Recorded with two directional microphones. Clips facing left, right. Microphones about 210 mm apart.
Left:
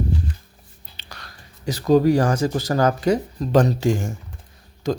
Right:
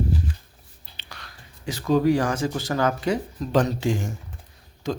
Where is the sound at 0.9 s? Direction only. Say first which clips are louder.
Left 2 dB; 40° left (ahead or behind).